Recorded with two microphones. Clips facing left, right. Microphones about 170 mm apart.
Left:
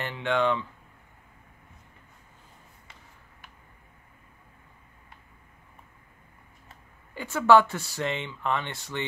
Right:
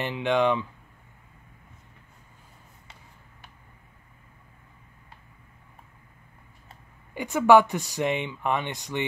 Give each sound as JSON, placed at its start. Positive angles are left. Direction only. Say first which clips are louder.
{"t": 0.0, "sound": "speech", "louder": "right 3 dB", "side_deg": -15}
{"t": 7.2, "sound": "speech", "louder": "right 2 dB", "side_deg": -15}